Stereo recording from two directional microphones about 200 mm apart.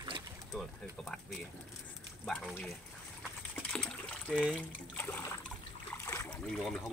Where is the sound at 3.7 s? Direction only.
5° left (ahead or behind).